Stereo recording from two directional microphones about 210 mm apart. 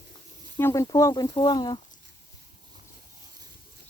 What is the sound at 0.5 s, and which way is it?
Speech, 15° left (ahead or behind).